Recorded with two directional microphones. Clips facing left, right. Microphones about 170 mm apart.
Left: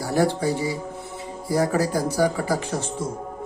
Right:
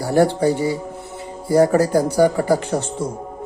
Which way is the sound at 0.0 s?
65° right (ahead or behind).